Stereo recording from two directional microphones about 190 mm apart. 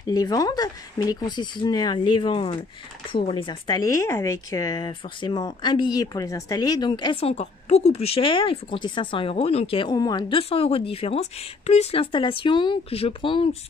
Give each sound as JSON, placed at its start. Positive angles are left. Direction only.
{"t": 0.0, "sound": "speech", "side_deg": 20}